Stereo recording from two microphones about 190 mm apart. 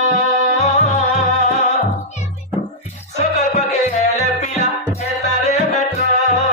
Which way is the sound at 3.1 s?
35° left (ahead or behind).